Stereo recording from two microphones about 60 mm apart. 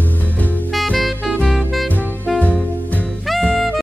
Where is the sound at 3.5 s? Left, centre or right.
Centre.